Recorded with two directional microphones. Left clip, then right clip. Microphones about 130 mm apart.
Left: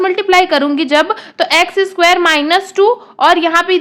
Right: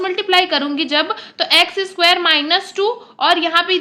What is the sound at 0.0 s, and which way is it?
A woman's voice, 40° left (ahead or behind).